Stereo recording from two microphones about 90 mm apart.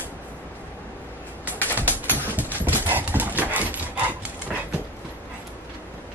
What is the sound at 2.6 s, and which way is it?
Clip-clop, 20° right (ahead or behind).